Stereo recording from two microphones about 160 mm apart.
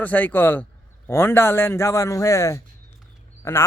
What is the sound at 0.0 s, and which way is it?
A man's voice, 10° left (ahead or behind).